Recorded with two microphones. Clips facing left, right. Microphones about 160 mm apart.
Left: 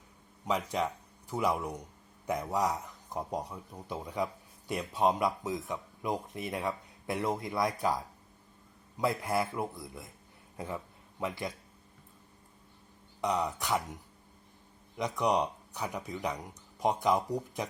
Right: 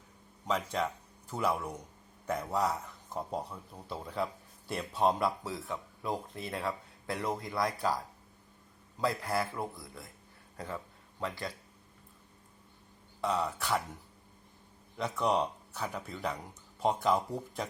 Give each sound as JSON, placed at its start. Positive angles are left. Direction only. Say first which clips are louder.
{"t": 0.4, "sound": "a man's voice", "louder": "left 1 dB", "side_deg": 10}
{"t": 11.2, "sound": "a man's voice", "louder": "left 2 dB", "side_deg": 20}
{"t": 13.2, "sound": "speech", "louder": "left 1 dB", "side_deg": 15}
{"t": 14.9, "sound": "speech", "louder": "left 1 dB", "side_deg": 15}